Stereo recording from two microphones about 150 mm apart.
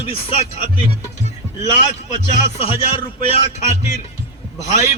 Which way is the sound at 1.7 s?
55° left (ahead or behind).